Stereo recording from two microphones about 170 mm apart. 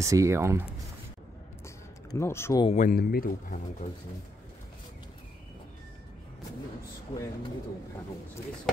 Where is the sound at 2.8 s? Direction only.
60° left (ahead or behind).